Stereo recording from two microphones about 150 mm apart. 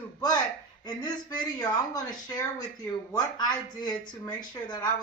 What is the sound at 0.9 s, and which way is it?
Speech, 30° left (ahead or behind).